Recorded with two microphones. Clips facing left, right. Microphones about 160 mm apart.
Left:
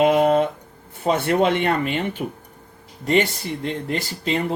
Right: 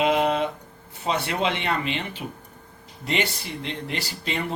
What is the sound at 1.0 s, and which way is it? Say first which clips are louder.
Speech: left 7 dB; 50° left (ahead or behind).